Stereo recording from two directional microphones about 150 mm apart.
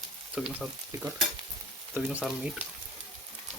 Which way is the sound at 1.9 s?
10° right (ahead or behind).